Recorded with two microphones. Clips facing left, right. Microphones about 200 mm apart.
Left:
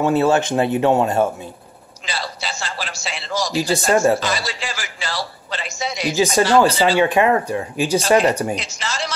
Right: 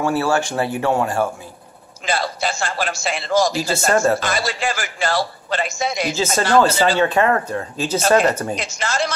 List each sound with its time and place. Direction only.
0.0 s speech: 20° left (ahead or behind)
2.0 s a man's voice: 50° right (ahead or behind)
3.6 s speech: 15° left (ahead or behind)
4.2 s a man's voice: 50° right (ahead or behind)
6.1 s speech: 15° left (ahead or behind)
8.5 s a man's voice: 50° right (ahead or behind)